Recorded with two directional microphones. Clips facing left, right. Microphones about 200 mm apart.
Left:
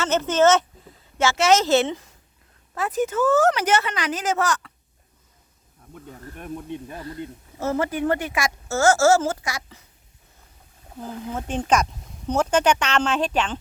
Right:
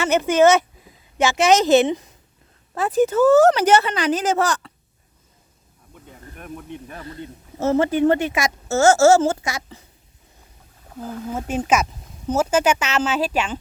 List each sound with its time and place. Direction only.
0.0 s speech: 10° right (ahead or behind)
2.7 s speech: 30° right (ahead or behind)
6.4 s speech: 20° left (ahead or behind)
7.6 s speech: 25° right (ahead or behind)
11.3 s speech: 5° right (ahead or behind)